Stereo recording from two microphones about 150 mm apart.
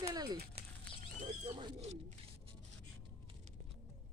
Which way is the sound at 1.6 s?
30° right (ahead or behind).